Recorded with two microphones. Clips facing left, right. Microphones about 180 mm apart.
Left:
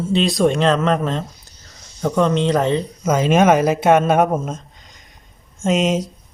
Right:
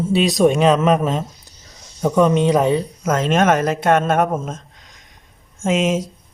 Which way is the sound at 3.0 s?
Centre (ahead or behind).